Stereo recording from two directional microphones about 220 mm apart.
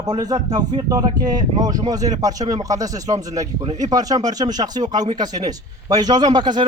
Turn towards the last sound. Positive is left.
turn(degrees=-20)  # may be behind; listen again after turning